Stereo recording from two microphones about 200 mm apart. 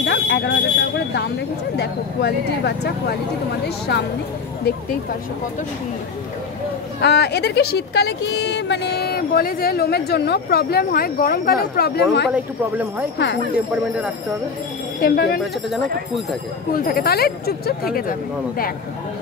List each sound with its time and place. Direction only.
0.0 s smoke detector: 55° left (ahead or behind)
1.8 s speech: 55° left (ahead or behind)
7.0 s speech: 55° left (ahead or behind)
15.0 s speech: 45° left (ahead or behind)
16.7 s speech: 45° left (ahead or behind)